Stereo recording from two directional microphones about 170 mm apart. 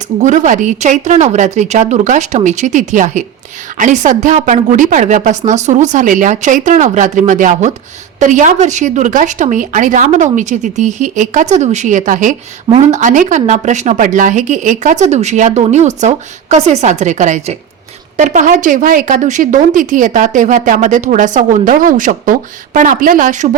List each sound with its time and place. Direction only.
0.2 s a woman's voice: 45° right (ahead or behind)